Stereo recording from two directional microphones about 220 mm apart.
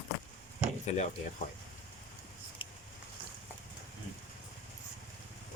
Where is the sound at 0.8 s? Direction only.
30° left (ahead or behind).